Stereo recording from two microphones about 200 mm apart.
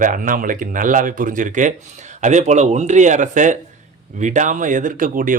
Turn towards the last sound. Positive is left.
turn(degrees=-40)  # may be behind; listen again after turning